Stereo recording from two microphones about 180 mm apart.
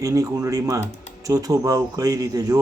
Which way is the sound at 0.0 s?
20° right (ahead or behind).